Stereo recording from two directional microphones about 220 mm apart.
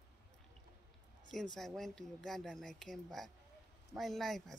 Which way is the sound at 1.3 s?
Centre (ahead or behind).